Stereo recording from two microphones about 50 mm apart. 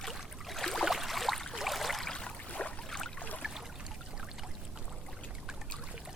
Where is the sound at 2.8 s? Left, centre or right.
Centre.